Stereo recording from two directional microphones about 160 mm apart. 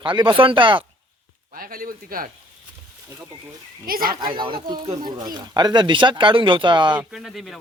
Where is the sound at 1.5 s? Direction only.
65° right (ahead or behind).